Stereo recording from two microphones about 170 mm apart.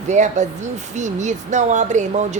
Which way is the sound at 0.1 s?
45° right (ahead or behind).